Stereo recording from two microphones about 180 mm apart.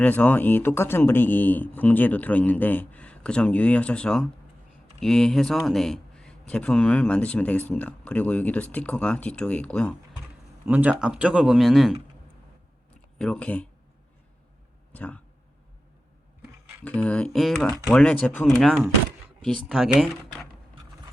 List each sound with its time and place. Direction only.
0.0 s speech: 10° left (ahead or behind)
10.7 s speech: 10° right (ahead or behind)
12.9 s a sound: 5° left (ahead or behind)
14.9 s speech: 10° left (ahead or behind)
16.8 s speech: 5° left (ahead or behind)